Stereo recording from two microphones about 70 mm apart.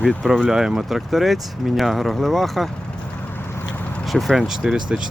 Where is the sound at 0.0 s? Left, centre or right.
Centre.